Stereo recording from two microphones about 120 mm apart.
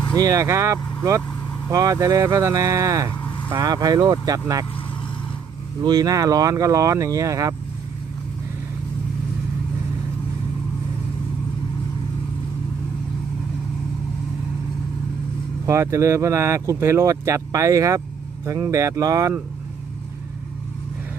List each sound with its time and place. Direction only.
0.1 s speech: 30° right (ahead or behind)
5.8 s speech: 35° right (ahead or behind)
15.6 s speech: 25° right (ahead or behind)